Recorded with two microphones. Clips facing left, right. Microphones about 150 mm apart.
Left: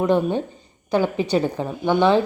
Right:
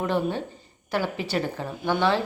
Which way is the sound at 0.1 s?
20° left (ahead or behind).